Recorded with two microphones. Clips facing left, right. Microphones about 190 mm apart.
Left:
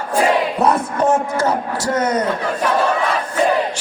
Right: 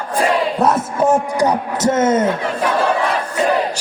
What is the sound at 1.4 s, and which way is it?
Speech, 20° right (ahead or behind).